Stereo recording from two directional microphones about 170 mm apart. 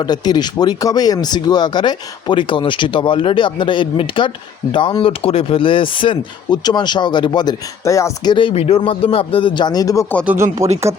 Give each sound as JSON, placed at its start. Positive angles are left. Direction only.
{"t": 0.0, "sound": "speech", "side_deg": 25}
{"t": 10.2, "sound": "speech", "side_deg": -15}